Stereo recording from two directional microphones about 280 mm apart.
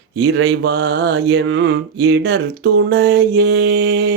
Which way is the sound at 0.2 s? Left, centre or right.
Right.